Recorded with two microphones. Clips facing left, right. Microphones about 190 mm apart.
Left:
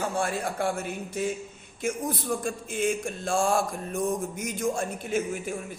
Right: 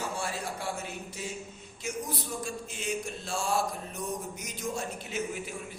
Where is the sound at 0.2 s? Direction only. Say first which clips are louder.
Left 7 dB; 55° left (ahead or behind).